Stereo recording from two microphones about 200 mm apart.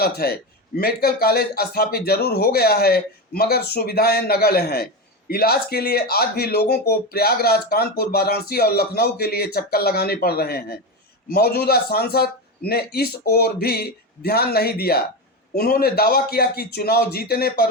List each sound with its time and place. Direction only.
0.0 s speech: 50° left (ahead or behind)